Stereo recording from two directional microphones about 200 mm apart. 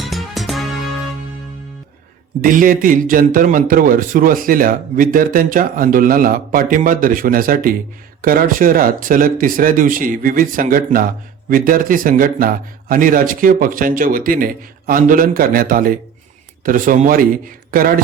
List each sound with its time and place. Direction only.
0.0 s music: centre (ahead or behind)
2.4 s speech: 45° right (ahead or behind)